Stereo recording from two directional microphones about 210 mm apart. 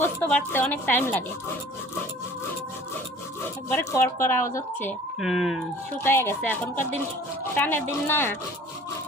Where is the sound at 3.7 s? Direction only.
15° left (ahead or behind).